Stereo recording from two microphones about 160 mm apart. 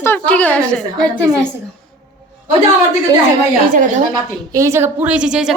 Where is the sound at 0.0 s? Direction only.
10° left (ahead or behind).